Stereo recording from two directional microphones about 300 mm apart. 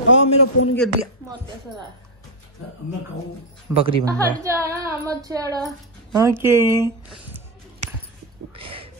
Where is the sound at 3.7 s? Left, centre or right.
Centre.